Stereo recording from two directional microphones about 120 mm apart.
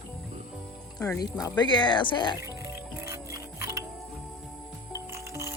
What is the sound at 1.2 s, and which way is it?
Speech, 35° left (ahead or behind).